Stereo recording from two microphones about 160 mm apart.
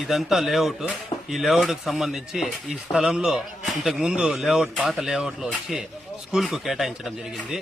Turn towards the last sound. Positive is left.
turn(degrees=0)  # may be behind; listen again after turning